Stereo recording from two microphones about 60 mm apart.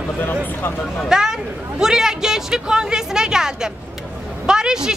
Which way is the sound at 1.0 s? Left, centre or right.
Centre.